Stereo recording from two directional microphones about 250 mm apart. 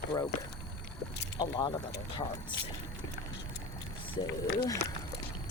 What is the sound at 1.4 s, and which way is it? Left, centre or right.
Speech, centre.